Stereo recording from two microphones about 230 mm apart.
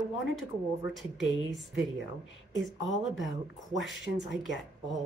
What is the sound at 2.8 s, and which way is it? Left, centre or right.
Speech, left.